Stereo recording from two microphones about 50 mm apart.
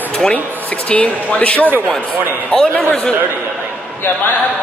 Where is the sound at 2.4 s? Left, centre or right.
Centre.